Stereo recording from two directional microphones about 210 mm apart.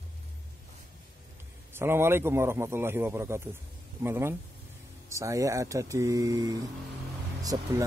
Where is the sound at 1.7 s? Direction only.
10° right (ahead or behind).